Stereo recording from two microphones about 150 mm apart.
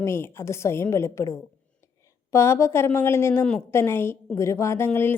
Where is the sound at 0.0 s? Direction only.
15° left (ahead or behind).